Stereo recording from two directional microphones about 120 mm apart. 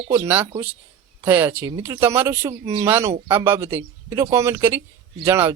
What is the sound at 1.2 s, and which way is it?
Speech, 15° right (ahead or behind).